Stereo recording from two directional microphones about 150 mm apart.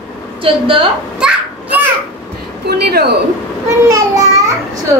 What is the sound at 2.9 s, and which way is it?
Speech, 90° right.